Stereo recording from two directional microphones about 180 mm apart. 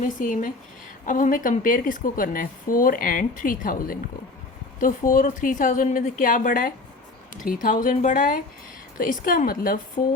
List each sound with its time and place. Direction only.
0.0 s a woman's voice: 45° left (ahead or behind)